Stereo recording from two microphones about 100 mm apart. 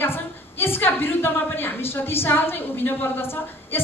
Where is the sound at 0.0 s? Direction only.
25° left (ahead or behind).